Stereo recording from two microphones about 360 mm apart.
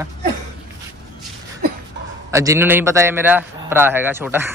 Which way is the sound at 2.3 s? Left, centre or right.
Centre.